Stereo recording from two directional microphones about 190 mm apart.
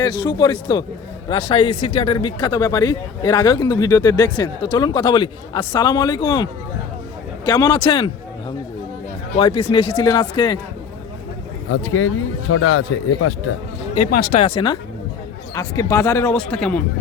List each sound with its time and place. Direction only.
0.0 s a man's voice: 20° left (ahead or behind)
11.7 s speech: 90° left
14.1 s speech: 50° left (ahead or behind)
14.4 s speech: 25° left (ahead or behind)
16.3 s speech: 5° left (ahead or behind)